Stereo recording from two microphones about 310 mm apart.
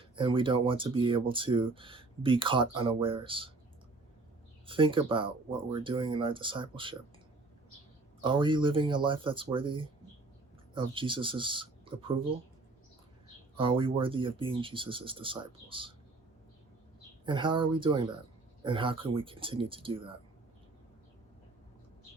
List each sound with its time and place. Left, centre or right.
0.2 s speech: centre
4.6 s speech: centre
8.2 s speech: centre
13.6 s speech: centre
17.2 s speech: centre